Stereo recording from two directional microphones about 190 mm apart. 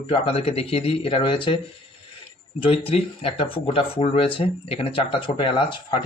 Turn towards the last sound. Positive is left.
turn(degrees=25)  # may be behind; listen again after turning